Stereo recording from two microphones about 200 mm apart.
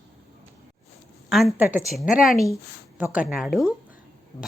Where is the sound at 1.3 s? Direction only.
Centre (ahead or behind).